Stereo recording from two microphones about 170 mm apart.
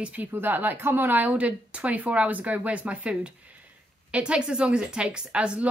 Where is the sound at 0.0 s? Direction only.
10° right (ahead or behind).